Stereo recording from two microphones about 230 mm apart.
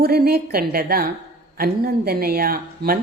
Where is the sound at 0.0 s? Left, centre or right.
Right.